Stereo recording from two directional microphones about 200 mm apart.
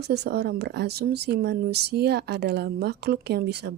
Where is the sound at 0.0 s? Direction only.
55° right (ahead or behind).